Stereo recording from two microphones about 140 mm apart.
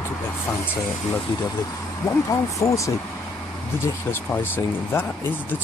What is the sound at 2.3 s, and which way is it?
Speech, 20° left (ahead or behind).